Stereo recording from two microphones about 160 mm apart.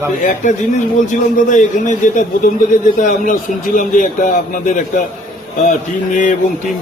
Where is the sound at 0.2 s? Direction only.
55° left (ahead or behind).